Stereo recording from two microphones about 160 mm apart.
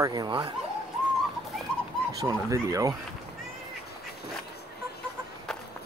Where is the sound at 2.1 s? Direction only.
20° right (ahead or behind).